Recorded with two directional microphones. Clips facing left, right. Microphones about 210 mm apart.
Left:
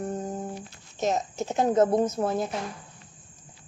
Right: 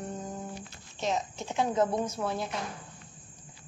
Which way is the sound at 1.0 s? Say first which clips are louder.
Left 5 dB; 45° left (ahead or behind).